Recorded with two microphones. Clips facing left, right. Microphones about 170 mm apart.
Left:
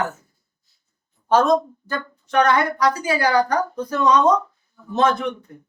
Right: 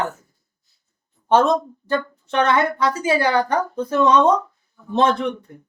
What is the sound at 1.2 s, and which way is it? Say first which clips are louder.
Speech: even; 25° right (ahead or behind).